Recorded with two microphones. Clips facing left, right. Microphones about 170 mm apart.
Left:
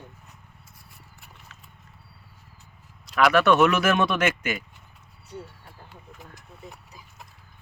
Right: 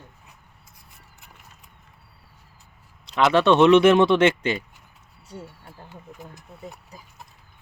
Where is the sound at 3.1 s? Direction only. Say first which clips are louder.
Right 1 dB; 25° right (ahead or behind).